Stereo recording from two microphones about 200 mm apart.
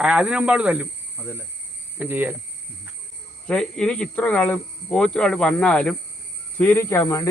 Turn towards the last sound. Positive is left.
turn(degrees=15)  # may be behind; listen again after turning